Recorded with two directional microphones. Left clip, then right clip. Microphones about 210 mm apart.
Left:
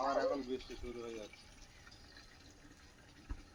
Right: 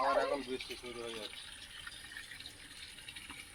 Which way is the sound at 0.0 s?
35° right (ahead or behind).